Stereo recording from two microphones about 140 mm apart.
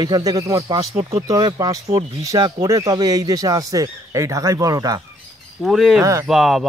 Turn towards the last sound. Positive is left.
turn(degrees=0)  # may be behind; listen again after turning